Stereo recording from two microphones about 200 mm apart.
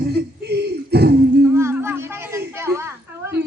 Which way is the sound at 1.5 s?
10° right (ahead or behind).